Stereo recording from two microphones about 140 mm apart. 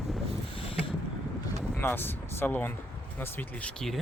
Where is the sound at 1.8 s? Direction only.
15° left (ahead or behind).